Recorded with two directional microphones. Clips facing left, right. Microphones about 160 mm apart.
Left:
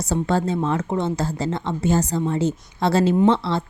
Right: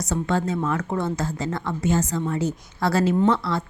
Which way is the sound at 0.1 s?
30° left (ahead or behind).